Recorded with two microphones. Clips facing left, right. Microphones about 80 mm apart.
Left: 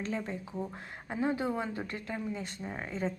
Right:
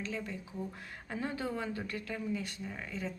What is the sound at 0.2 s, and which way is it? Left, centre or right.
A woman's voice, left.